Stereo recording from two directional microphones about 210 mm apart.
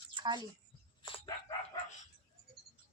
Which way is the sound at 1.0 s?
25° left (ahead or behind).